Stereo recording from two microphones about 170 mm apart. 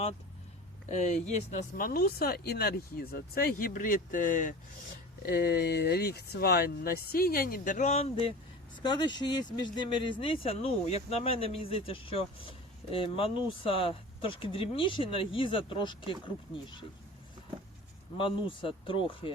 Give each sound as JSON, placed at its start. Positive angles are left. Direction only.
{"t": 0.9, "sound": "speech", "side_deg": 45}
{"t": 1.5, "sound": "speech", "side_deg": 55}
{"t": 5.2, "sound": "speech", "side_deg": 65}
{"t": 8.8, "sound": "speech", "side_deg": 25}
{"t": 18.2, "sound": "speech", "side_deg": 30}